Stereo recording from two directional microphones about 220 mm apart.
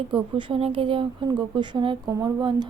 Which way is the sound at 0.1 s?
20° right (ahead or behind).